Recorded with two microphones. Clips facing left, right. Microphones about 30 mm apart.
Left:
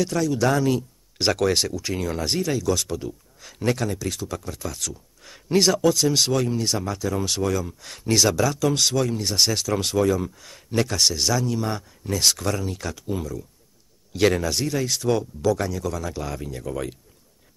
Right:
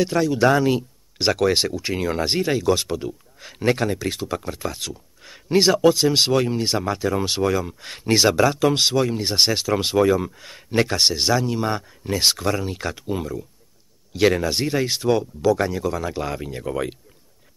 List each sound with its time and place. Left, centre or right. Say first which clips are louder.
0.0 s speech: right 4 dB; right
1.1 s speech: right 2 dB; centre
1.5 s speech: right 2 dB; right
5.2 s speech: right 2 dB; centre
14.1 s speech: right 2 dB; centre
14.5 s speech: right 3 dB; right
15.0 s speech: right 3 dB; centre